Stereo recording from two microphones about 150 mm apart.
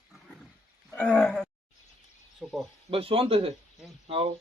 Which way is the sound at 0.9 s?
10° left (ahead or behind).